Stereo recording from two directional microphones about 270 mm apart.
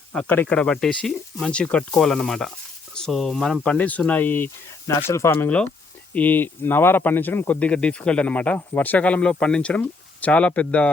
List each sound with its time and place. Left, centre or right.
0.1 s speech: centre